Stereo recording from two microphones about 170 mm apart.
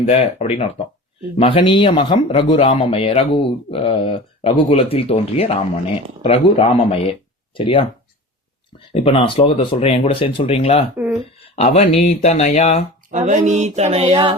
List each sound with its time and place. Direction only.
0.0 s speech: 35° left (ahead or behind)
8.9 s speech: 35° left (ahead or behind)
10.9 s speech: 10° right (ahead or behind)
11.5 s speech: 40° left (ahead or behind)
13.1 s speech: 45° right (ahead or behind)